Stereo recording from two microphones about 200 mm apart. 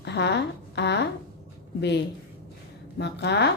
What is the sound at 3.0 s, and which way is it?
Speech, 60° left (ahead or behind).